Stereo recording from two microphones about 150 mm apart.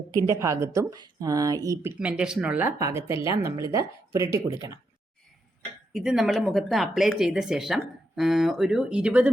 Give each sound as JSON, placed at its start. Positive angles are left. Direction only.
{"t": 0.3, "sound": "speech", "side_deg": -20}
{"t": 2.0, "sound": "speech", "side_deg": -10}
{"t": 5.9, "sound": "speech", "side_deg": -5}